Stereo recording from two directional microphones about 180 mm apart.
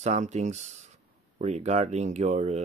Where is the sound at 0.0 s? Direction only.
40° right (ahead or behind).